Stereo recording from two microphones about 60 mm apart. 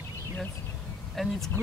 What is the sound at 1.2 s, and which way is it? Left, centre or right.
Speech, centre.